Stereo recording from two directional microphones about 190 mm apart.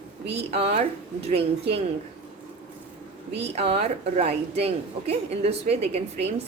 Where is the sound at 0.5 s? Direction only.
30° right (ahead or behind).